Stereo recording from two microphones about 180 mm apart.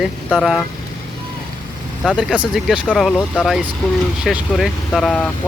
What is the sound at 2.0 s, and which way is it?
Speech, centre (ahead or behind).